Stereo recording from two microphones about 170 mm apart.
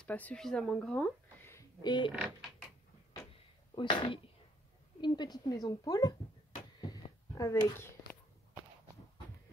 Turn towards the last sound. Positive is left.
turn(degrees=15)  # may be behind; listen again after turning